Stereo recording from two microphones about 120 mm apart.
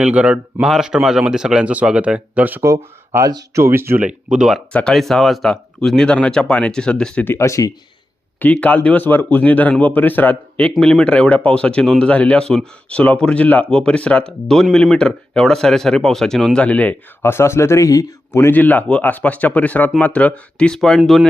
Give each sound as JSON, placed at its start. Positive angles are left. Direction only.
{"t": 0.0, "sound": "speech", "side_deg": -10}
{"t": 2.6, "sound": "speech", "side_deg": -25}
{"t": 4.7, "sound": "speech", "side_deg": 10}
{"t": 7.3, "sound": "speech", "side_deg": 25}
{"t": 8.4, "sound": "speech", "side_deg": 10}